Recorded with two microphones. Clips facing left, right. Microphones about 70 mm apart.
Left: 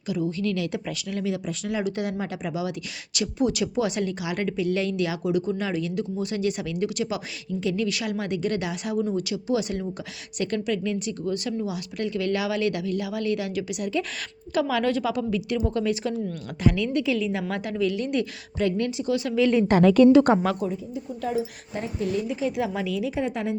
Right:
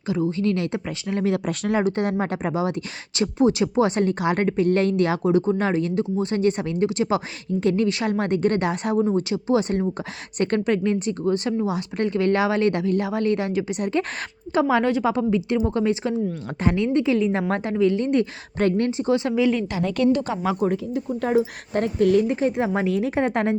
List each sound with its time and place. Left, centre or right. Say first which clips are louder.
0.1 s speech: right 4 dB; right
1.2 s a woman's voice: right 7 dB; right
19.7 s a woman's voice: left 6 dB; left
20.7 s speech: right 7 dB; right
22.5 s a woman's voice: right 5 dB; right